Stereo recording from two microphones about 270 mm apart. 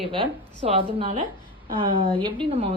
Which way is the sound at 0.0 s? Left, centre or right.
Centre.